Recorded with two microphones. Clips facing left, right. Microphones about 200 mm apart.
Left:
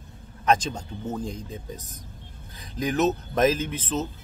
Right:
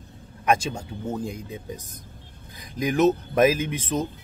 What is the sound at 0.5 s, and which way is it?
Speech, 10° right (ahead or behind).